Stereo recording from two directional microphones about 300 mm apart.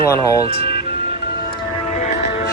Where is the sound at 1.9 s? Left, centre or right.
Left.